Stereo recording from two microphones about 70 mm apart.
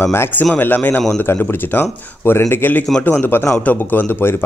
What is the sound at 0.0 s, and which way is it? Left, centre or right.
Speech, left.